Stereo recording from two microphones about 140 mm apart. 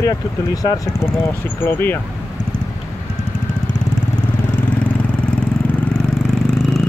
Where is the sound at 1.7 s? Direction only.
15° left (ahead or behind).